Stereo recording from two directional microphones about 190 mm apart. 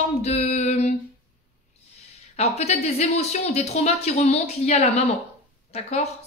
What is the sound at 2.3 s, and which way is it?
A woman's voice, 35° left (ahead or behind).